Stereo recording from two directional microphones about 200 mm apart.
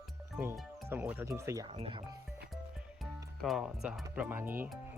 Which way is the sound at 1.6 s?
25° right (ahead or behind).